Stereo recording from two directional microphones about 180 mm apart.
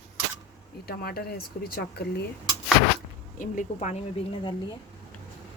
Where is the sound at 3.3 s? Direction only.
45° left (ahead or behind).